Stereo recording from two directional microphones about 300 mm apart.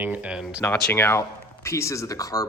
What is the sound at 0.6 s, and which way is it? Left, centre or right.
Speech, centre.